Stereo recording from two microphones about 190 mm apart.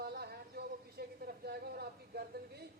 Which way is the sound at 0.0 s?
55° right (ahead or behind).